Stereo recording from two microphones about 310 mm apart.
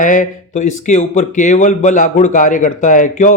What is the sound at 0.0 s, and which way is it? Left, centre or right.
Speech, left.